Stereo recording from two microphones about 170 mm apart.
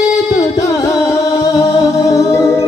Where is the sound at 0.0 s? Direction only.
20° left (ahead or behind).